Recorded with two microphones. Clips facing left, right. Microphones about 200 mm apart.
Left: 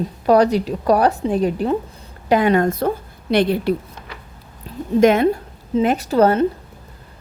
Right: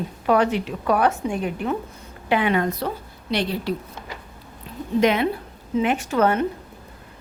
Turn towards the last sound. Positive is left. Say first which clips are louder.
# left 5 dB
turn(degrees=35)  # may be behind; listen again after turning